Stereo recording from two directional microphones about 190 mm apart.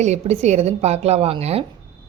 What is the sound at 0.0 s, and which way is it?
A woman's voice, 35° right (ahead or behind).